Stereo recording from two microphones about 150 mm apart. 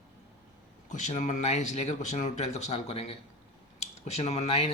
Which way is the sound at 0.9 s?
55° left (ahead or behind).